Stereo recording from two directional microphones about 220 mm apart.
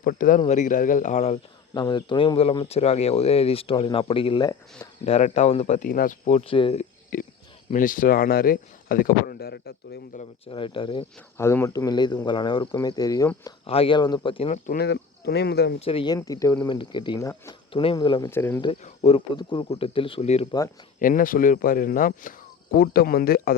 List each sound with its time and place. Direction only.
0.0 s speech: 40° left (ahead or behind)
1.7 s speech: 20° left (ahead or behind)
7.1 s a sound: 40° left (ahead or behind)
7.7 s speech: 35° left (ahead or behind)
10.2 s speech: 25° left (ahead or behind)
11.3 s speech: 10° left (ahead or behind)
14.7 s speech: 50° left (ahead or behind)
15.8 s speech: 25° left (ahead or behind)
18.6 s speech: 25° left (ahead or behind)
21.0 s speech: 40° left (ahead or behind)